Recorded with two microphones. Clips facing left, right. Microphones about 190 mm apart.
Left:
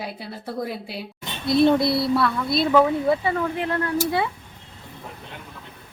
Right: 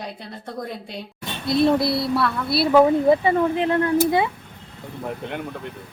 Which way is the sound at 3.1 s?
20° right (ahead or behind).